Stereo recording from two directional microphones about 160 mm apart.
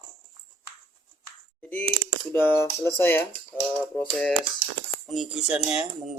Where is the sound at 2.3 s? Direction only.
15° left (ahead or behind).